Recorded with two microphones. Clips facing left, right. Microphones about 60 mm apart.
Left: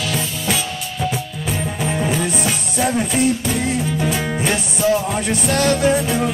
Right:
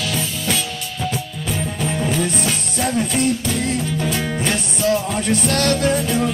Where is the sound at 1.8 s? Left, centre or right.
Centre.